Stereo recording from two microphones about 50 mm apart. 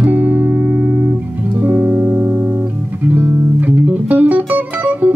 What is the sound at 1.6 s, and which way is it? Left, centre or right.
Music, right.